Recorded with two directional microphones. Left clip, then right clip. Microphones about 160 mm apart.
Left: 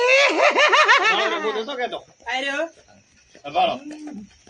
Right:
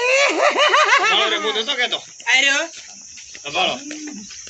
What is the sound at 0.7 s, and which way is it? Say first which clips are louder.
Snicker: right 1 dB; 30° left (ahead or behind).